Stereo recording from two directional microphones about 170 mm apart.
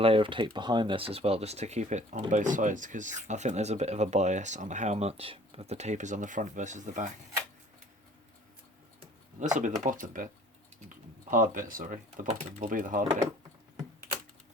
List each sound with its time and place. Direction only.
0.0 s speech: 30° right (ahead or behind); by 7.1 s 45° right (ahead or behind)
9.6 s speech: 50° right (ahead or behind)
11.3 s speech: 55° right (ahead or behind)